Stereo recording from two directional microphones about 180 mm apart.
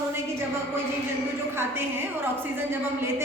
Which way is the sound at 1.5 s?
15° right (ahead or behind).